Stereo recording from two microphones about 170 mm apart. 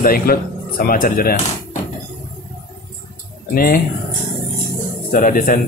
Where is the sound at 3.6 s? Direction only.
60° left (ahead or behind).